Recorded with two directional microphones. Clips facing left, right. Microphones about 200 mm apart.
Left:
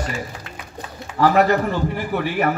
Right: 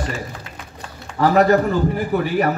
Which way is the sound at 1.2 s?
40° right (ahead or behind).